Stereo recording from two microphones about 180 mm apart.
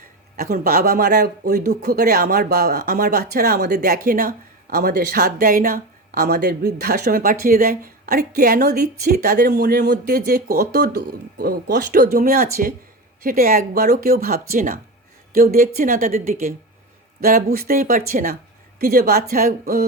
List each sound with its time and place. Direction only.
0.3 s a woman's voice: 55° right (ahead or behind)